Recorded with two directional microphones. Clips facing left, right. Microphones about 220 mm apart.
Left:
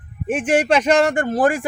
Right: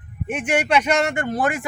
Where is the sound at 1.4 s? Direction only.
45° left (ahead or behind).